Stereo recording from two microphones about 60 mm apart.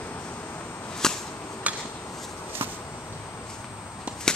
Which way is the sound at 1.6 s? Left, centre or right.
Right.